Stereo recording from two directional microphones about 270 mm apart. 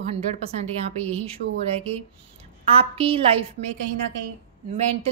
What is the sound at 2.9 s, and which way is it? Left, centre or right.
Speech, right.